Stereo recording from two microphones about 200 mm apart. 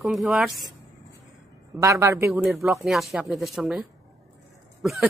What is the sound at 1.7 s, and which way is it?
Speech, 15° right (ahead or behind).